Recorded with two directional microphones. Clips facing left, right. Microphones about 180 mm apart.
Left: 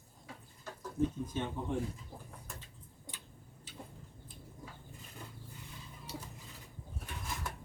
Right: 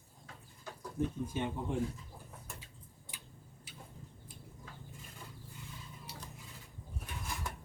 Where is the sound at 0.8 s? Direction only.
10° right (ahead or behind).